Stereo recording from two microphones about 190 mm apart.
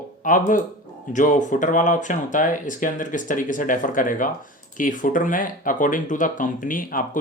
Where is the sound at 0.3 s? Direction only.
45° left (ahead or behind).